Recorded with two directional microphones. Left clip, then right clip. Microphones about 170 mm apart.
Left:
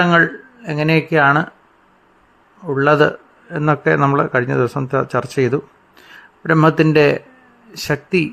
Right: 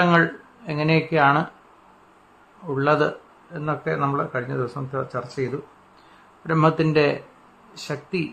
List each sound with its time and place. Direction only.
0.0 s speech: 25° left (ahead or behind)
2.6 s a man's voice: 30° left (ahead or behind)
3.5 s speech: 50° left (ahead or behind)
6.5 s a man's voice: 35° left (ahead or behind)